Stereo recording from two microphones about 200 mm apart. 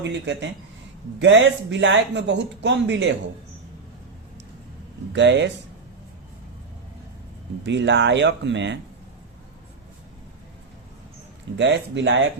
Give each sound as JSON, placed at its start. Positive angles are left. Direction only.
{"t": 0.0, "sound": "speech", "side_deg": -60}
{"t": 5.1, "sound": "speech", "side_deg": -65}
{"t": 7.6, "sound": "speech", "side_deg": -60}
{"t": 11.5, "sound": "speech", "side_deg": -65}